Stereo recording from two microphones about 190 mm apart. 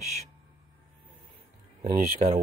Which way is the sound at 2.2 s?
35° right (ahead or behind).